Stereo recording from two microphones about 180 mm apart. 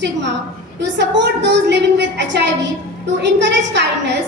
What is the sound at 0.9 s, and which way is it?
A woman's voice, 75° right (ahead or behind).